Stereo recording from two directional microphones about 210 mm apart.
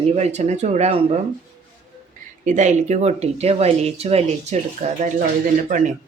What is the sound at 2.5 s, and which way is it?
Speech, 35° right (ahead or behind).